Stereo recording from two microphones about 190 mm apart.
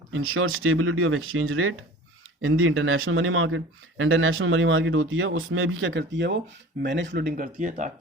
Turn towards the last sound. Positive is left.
turn(degrees=-40)  # may be behind; listen again after turning